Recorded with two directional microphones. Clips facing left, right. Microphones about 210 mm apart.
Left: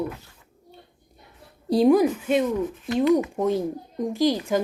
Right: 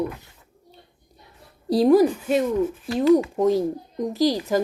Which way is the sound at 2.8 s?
30° right (ahead or behind).